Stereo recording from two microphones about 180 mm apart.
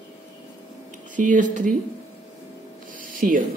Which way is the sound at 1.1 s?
45° right (ahead or behind).